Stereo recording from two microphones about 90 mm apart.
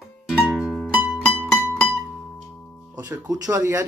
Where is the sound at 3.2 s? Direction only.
45° right (ahead or behind).